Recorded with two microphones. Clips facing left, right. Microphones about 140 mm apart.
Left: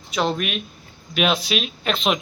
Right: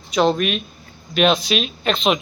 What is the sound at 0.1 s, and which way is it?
Speech, 5° left (ahead or behind).